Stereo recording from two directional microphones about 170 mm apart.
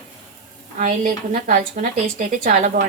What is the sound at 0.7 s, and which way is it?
A woman's voice, 50° right (ahead or behind).